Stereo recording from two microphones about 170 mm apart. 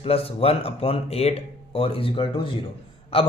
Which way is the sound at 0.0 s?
35° left (ahead or behind).